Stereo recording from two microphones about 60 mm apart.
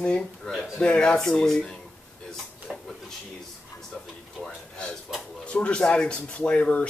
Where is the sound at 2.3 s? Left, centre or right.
Centre.